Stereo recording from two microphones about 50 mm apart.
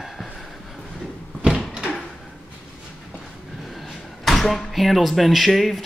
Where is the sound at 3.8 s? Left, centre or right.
Centre.